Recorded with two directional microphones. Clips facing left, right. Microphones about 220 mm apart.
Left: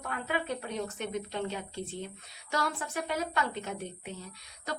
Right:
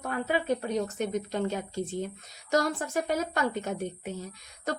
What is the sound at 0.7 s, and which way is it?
A woman's voice, 40° right (ahead or behind).